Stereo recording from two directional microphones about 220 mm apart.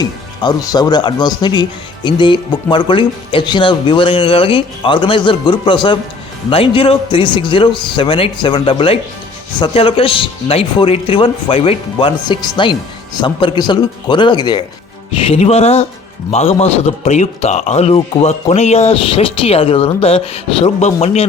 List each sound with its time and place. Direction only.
0.0 s a man's voice: 15° left (ahead or behind)